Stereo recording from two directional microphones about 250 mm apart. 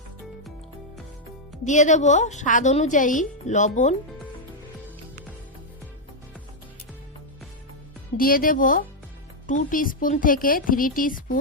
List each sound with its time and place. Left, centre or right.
1.6 s a woman's voice: left
8.2 s speech: left